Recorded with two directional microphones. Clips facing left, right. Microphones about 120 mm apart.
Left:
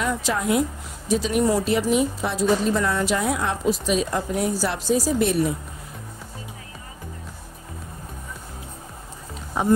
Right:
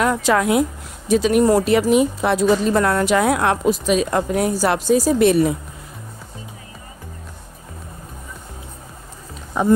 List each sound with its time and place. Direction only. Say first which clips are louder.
0.0 s a woman's voice: right 7 dB; 70° right (ahead or behind); by 5.5 s 85° right